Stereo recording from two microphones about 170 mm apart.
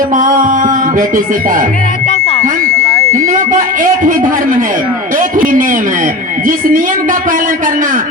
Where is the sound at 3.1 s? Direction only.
45° right (ahead or behind).